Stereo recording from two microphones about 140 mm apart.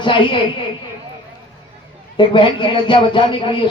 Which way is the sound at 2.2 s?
35° left (ahead or behind).